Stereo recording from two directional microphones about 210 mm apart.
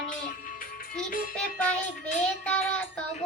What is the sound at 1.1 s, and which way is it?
Speech, 40° left (ahead or behind).